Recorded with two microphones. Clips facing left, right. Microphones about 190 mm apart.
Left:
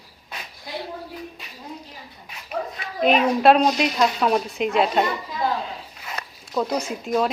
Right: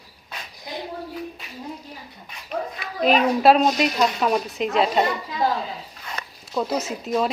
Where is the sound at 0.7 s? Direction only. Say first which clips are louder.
Left 1 dB; 20° right (ahead or behind).